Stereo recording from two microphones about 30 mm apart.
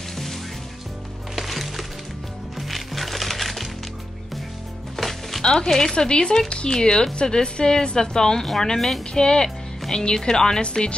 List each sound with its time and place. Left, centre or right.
1.3 s music: centre
4.9 s music: centre
5.4 s speech: left
5.7 s speech: centre
5.9 s a woman's voice: left; by 9.0 s centre
9.1 s a woman's voice: left
10.6 s speech: left